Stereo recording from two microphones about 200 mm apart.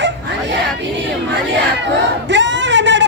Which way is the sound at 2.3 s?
65° right (ahead or behind).